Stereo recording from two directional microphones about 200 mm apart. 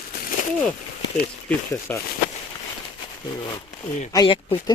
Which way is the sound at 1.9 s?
10° left (ahead or behind).